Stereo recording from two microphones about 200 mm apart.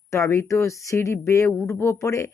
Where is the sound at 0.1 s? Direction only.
15° left (ahead or behind).